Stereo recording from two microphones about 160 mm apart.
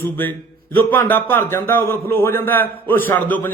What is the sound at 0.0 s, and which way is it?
Speech, 10° left (ahead or behind).